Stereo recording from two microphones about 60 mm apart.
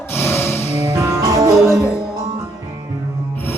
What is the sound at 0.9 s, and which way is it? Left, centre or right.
Music, right.